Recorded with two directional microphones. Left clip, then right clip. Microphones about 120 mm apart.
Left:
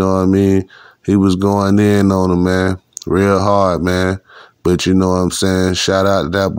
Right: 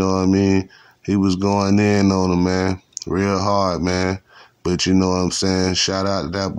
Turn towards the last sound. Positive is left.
turn(degrees=40)  # may be behind; listen again after turning